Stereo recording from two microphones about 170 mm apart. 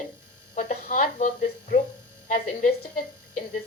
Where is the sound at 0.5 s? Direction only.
50° left (ahead or behind).